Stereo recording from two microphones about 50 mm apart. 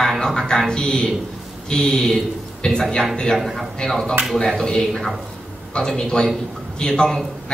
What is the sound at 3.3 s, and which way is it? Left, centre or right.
A man's voice, centre.